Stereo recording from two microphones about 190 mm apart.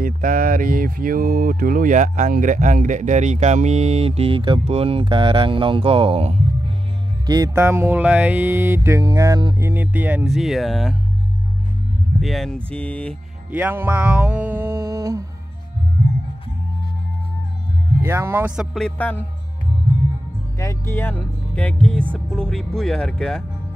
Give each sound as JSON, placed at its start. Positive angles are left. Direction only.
{"t": 0.0, "sound": "mantra", "side_deg": -45}
{"t": 7.2, "sound": "music", "side_deg": -20}
{"t": 12.2, "sound": "speech", "side_deg": 0}
{"t": 13.5, "sound": "music", "side_deg": -10}
{"t": 18.0, "sound": "speech", "side_deg": -10}
{"t": 20.5, "sound": "speech", "side_deg": 15}